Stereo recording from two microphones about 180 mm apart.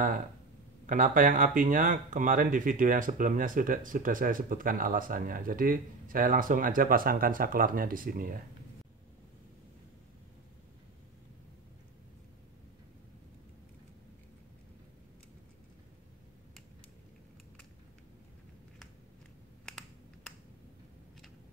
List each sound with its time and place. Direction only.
0.8 s speech: 50° right (ahead or behind)